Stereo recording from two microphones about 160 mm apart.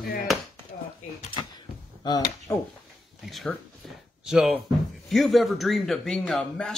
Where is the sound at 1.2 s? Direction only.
30° left (ahead or behind).